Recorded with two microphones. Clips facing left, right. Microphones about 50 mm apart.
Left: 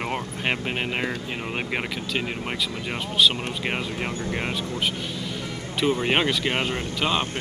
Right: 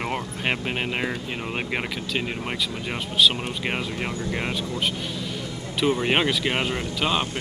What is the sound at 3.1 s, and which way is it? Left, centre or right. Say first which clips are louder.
Speech: even; centre.